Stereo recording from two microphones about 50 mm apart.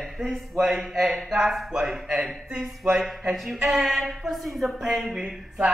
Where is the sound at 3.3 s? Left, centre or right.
Centre.